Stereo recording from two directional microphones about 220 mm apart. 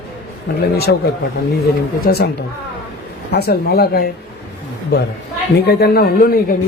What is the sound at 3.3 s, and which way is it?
Speech, 45° left (ahead or behind).